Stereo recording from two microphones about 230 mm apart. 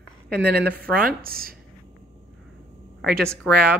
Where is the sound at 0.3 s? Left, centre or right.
Right.